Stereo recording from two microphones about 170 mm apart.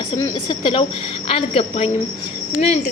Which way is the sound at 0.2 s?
25° left (ahead or behind).